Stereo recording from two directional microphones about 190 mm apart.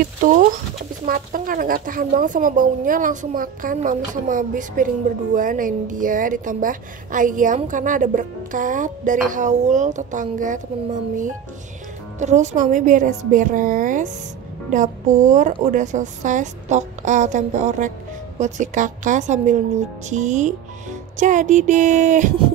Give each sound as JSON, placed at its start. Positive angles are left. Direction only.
{"t": 0.0, "sound": "a woman's voice", "side_deg": -45}
{"t": 12.2, "sound": "a woman's voice", "side_deg": -40}